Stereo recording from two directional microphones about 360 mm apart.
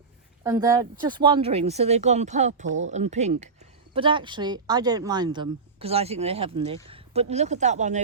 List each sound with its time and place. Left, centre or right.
0.4 s speech: centre